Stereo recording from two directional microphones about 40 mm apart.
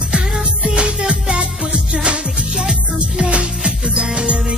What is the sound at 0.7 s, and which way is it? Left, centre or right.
Music, right.